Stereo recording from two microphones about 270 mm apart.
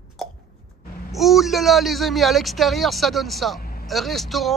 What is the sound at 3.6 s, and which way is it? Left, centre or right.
Vehicle, left.